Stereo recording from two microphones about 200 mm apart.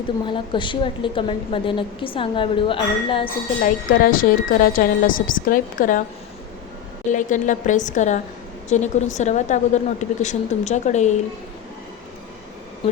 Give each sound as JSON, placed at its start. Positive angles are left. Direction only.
{"t": 0.3, "sound": "a woman's voice", "side_deg": 25}
{"t": 3.6, "sound": "a woman's voice", "side_deg": 45}
{"t": 7.1, "sound": "a woman's voice", "side_deg": 40}